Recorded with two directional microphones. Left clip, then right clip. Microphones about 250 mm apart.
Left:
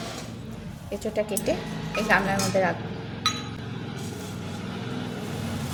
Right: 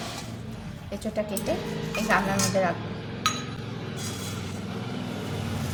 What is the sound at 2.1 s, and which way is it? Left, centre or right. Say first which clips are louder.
Speech: left 2 dB; left.